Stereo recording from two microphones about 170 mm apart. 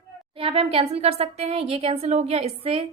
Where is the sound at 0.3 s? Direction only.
35° right (ahead or behind).